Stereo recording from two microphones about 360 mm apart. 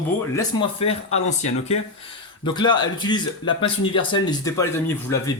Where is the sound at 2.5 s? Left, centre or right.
Centre.